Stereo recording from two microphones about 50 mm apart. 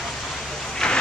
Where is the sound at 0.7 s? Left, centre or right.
Centre.